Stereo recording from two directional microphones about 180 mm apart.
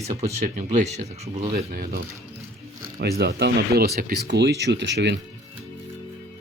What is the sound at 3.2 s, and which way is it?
Speech, 65° right (ahead or behind).